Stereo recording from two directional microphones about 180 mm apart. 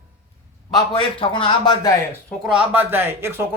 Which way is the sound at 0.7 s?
30° left (ahead or behind).